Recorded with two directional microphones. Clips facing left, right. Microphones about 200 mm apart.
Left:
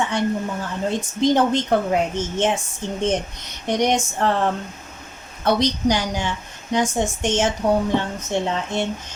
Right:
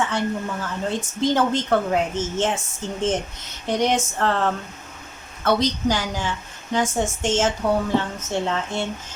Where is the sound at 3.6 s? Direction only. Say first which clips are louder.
Left 1 dB; 15° left (ahead or behind).